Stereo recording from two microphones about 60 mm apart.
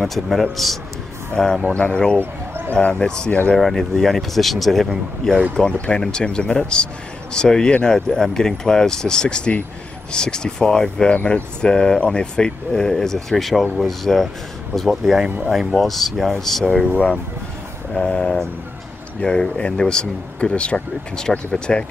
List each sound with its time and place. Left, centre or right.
0.0 s speech: centre
2.1 s a sound: right
2.7 s speech: left; by 5.4 s centre
5.5 s speech: centre